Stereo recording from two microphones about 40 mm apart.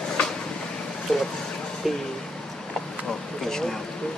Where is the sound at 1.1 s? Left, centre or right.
Centre.